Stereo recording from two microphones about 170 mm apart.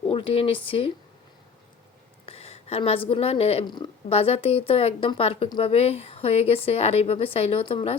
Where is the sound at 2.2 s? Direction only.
35° left (ahead or behind).